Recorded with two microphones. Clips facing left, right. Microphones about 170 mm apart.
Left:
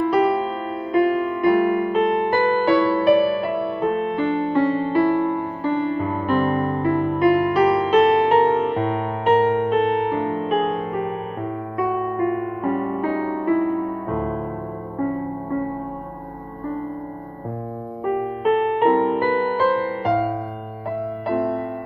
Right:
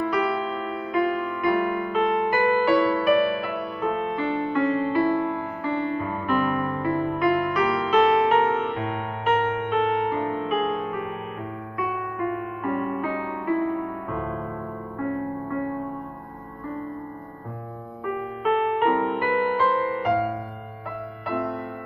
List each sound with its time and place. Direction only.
0.1 s music: 30° left (ahead or behind)
12.2 s music: 35° left (ahead or behind)
18.4 s music: 35° left (ahead or behind)